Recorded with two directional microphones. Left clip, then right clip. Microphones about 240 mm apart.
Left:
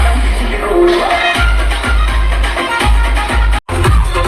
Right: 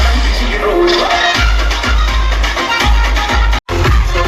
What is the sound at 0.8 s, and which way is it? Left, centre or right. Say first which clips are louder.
Music: left 1 dB; centre.